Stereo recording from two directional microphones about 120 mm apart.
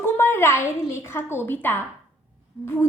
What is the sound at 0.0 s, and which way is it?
A woman's voice, 20° left (ahead or behind).